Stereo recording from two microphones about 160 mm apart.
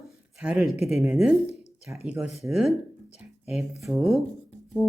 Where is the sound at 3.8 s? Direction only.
Centre (ahead or behind).